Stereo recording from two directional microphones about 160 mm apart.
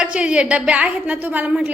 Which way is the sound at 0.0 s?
5° right (ahead or behind).